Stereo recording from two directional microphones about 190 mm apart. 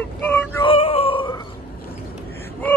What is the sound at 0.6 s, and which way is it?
Opera, 30° left (ahead or behind).